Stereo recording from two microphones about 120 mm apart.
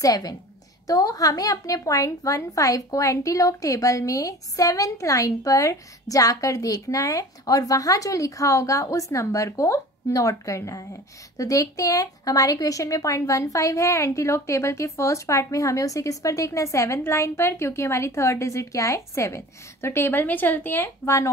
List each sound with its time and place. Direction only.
0.0 s a woman's voice: 30° left (ahead or behind)